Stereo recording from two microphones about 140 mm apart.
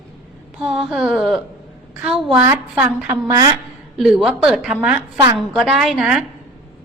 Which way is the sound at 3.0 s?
25° right (ahead or behind).